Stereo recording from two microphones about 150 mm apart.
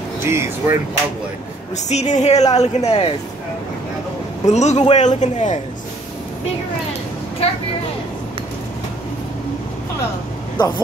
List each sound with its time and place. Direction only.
0.3 s speech: 15° right (ahead or behind)
1.9 s speech: 50° left (ahead or behind)
4.5 s speech: 50° left (ahead or behind)